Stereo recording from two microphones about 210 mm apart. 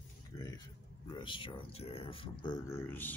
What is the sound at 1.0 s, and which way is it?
Speech, 25° left (ahead or behind).